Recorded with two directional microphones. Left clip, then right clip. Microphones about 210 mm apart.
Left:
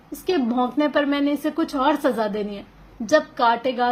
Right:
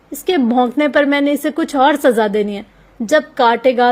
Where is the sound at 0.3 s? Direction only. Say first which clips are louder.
Right 7 dB; 40° right (ahead or behind).